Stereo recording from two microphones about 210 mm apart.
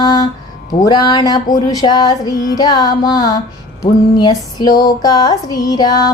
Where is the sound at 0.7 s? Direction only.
20° left (ahead or behind).